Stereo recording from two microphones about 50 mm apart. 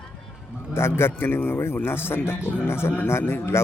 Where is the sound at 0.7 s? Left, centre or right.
Left.